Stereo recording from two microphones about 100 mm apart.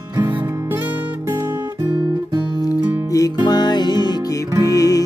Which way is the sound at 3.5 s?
45° left (ahead or behind).